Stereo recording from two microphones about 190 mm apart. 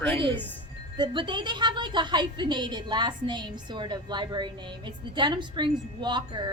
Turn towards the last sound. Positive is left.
turn(degrees=-25)  # may be behind; listen again after turning